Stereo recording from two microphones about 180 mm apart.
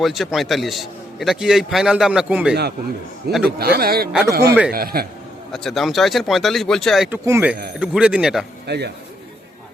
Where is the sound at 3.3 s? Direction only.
60° right (ahead or behind).